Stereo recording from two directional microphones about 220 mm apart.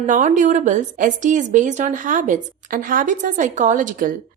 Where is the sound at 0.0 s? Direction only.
35° right (ahead or behind).